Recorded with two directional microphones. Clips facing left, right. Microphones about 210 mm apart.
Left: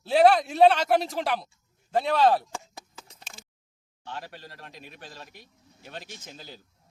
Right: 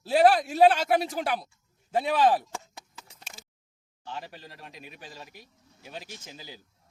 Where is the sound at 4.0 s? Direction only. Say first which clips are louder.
Even; centre (ahead or behind).